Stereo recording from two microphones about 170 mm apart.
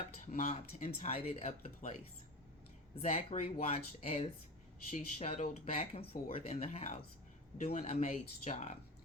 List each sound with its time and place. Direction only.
0.3 s speech: 45° left (ahead or behind)
2.9 s speech: 35° left (ahead or behind)